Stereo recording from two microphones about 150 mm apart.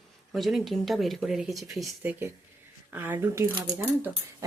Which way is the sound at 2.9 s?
15° right (ahead or behind).